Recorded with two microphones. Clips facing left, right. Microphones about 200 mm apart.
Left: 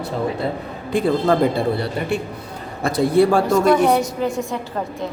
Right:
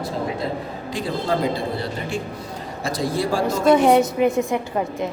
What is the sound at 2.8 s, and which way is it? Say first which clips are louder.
Speech: left 8 dB; 60° left (ahead or behind).